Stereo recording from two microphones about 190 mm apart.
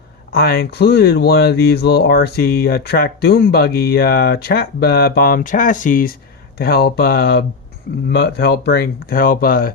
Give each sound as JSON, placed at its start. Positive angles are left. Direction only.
{"t": 0.3, "sound": "speech", "side_deg": 55}